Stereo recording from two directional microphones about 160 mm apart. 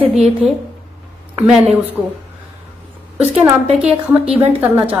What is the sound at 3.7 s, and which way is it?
Speech, 5° right (ahead or behind).